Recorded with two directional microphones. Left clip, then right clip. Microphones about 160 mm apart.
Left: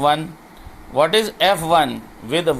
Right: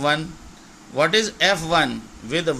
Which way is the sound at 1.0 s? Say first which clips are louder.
Left 3 dB; 25° right (ahead or behind).